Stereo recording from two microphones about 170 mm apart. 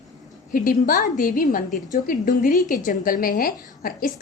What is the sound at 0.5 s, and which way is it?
A woman's voice, 55° left (ahead or behind).